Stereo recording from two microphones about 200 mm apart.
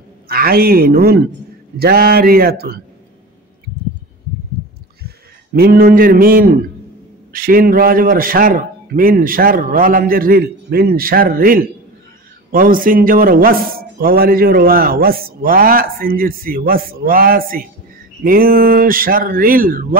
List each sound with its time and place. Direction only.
0.3 s a man's voice: 50° right (ahead or behind)
5.0 s a man's voice: 50° right (ahead or behind)